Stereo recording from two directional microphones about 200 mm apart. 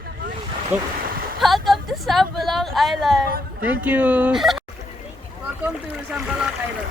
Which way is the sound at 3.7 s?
5° right (ahead or behind).